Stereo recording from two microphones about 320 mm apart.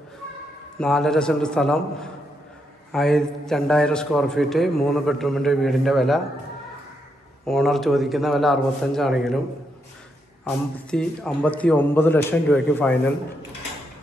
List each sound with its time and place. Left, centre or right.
0.7 s a man's voice: centre
7.4 s a man's voice: centre
10.4 s a man's voice: centre